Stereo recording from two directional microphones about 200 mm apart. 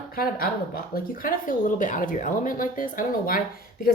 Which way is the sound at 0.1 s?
50° left (ahead or behind).